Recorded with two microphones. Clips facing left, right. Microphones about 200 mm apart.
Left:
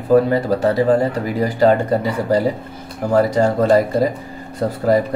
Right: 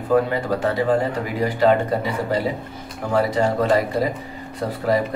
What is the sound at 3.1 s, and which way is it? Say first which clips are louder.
Speech: left 4 dB; 45° left (ahead or behind).